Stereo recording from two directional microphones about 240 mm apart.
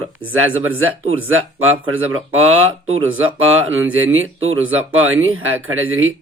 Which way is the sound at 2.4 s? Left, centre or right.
Right.